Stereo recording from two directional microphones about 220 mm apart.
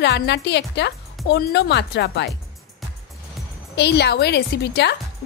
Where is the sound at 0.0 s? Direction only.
50° left (ahead or behind).